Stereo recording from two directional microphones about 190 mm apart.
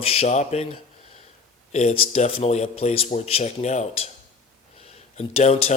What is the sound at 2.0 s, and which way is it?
Speech, 35° left (ahead or behind).